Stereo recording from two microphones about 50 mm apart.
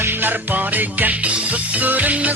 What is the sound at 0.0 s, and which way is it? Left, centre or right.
Music, right.